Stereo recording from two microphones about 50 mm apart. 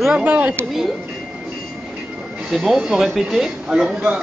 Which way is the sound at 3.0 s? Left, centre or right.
Centre.